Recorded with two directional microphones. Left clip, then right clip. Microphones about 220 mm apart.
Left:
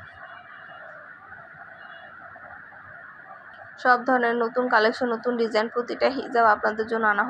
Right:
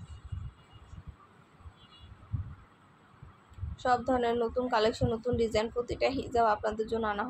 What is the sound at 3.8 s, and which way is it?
A woman's voice, 15° left (ahead or behind).